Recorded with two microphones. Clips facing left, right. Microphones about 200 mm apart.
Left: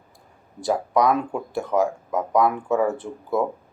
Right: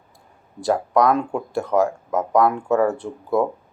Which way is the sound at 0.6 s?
Centre (ahead or behind).